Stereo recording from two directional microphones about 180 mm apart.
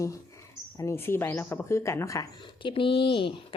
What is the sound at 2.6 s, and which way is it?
Speech, 30° left (ahead or behind).